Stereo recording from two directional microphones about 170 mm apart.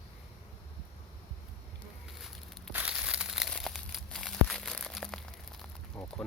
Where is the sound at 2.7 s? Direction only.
5° right (ahead or behind).